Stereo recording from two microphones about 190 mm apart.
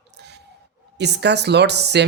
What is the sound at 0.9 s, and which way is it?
Speech, 65° right (ahead or behind).